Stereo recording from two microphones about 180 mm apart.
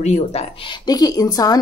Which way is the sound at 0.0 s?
35° left (ahead or behind).